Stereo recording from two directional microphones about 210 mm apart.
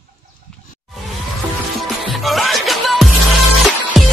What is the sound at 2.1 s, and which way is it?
Music, centre (ahead or behind).